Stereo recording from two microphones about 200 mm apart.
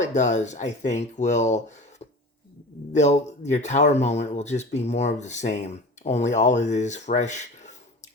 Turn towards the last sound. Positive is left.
turn(degrees=35)  # may be behind; listen again after turning